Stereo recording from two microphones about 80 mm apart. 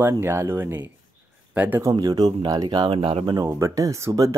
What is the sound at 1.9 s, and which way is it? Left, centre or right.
Speech, right.